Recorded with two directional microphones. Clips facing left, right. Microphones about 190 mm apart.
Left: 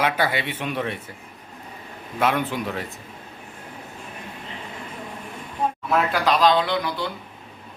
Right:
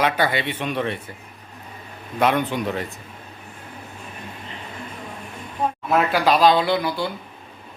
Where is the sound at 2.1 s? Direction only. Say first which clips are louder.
Right 3 dB; 5° left (ahead or behind).